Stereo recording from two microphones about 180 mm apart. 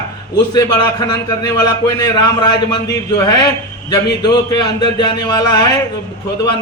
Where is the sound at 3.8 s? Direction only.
25° left (ahead or behind).